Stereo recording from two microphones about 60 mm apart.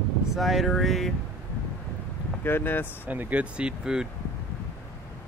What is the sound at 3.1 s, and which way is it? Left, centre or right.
Speech, right.